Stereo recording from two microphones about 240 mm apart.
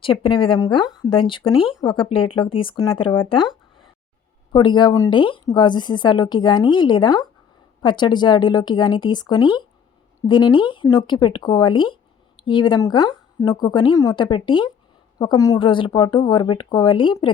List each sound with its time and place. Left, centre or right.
0.0 s speech: left